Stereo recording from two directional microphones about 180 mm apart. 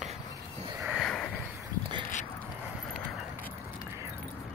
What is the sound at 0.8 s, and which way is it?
Sniff, centre (ahead or behind).